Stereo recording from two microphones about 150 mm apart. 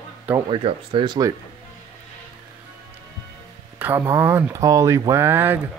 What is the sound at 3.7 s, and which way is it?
Speech, 15° right (ahead or behind).